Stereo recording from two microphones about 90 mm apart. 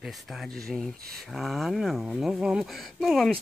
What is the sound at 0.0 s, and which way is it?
Speech, centre (ahead or behind).